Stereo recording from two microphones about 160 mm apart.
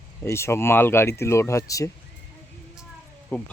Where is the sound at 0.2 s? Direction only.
15° left (ahead or behind).